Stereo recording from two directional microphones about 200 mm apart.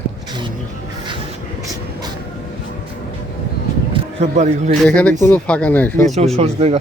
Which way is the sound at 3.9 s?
30° right (ahead or behind).